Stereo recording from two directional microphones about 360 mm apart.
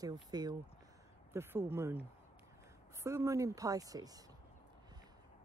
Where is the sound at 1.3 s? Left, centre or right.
Centre.